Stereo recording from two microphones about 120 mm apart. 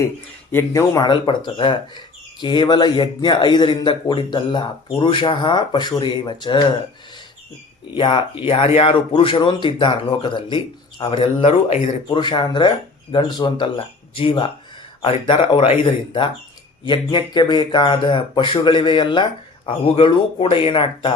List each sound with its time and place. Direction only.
0.5 s speech: 25° left (ahead or behind)
1.0 s speech: 40° left (ahead or behind)
7.9 s speech: 45° left (ahead or behind)
16.8 s speech: 40° left (ahead or behind)